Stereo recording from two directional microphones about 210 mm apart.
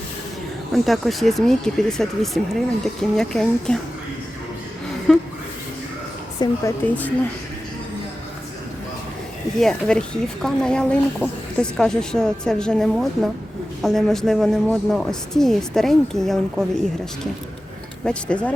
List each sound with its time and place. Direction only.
0.7 s speech: centre (ahead or behind)
5.1 s speech: 5° left (ahead or behind)
6.4 s a woman's voice: 10° left (ahead or behind)
9.6 s speech: 5° left (ahead or behind)
18.0 s speech: 5° left (ahead or behind)